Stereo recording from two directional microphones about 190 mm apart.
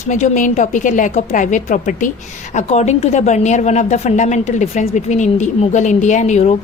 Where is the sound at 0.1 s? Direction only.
40° left (ahead or behind).